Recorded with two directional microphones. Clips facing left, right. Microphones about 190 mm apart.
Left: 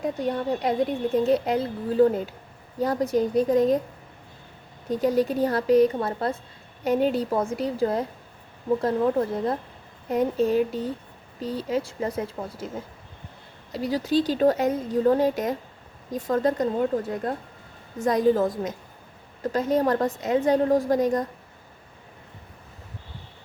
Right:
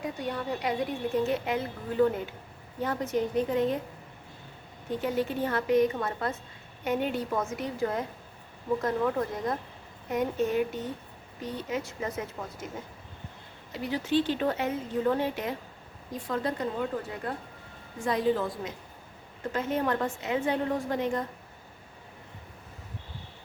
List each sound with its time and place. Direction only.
1.1 s a woman's voice: 35° left (ahead or behind)
4.9 s a woman's voice: 40° left (ahead or behind)
13.7 s a woman's voice: 35° left (ahead or behind)